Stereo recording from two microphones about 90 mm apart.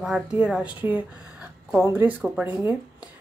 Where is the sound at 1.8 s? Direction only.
25° right (ahead or behind).